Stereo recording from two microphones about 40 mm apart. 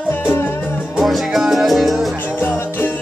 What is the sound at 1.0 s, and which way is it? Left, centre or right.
Salsa music, centre.